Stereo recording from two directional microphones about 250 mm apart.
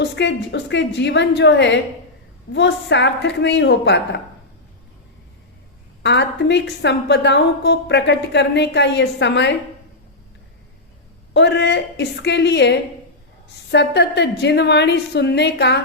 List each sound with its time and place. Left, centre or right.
0.0 s a woman's voice: left
6.0 s a woman's voice: left
11.3 s a woman's voice: left